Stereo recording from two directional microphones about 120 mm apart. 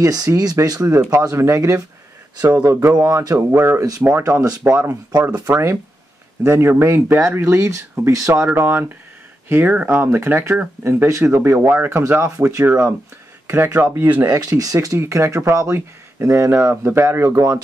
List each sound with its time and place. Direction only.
0.0 s speech: 30° right (ahead or behind); by 14.3 s 15° right (ahead or behind)
14.3 s speech: 30° right (ahead or behind)